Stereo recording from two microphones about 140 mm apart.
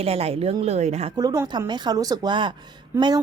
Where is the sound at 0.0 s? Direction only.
45° right (ahead or behind).